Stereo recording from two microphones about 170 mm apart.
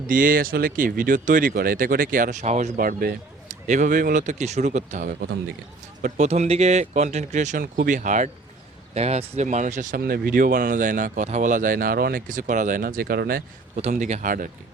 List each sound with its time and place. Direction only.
0.1 s speech: 55° right (ahead or behind)
10.0 s speech: 60° right (ahead or behind)
13.7 s speech: 45° right (ahead or behind)